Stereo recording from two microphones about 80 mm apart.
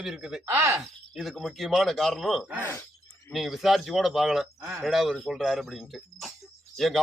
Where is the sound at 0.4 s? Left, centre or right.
Right.